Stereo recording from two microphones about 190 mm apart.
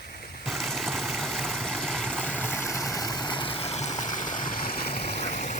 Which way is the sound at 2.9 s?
20° left (ahead or behind).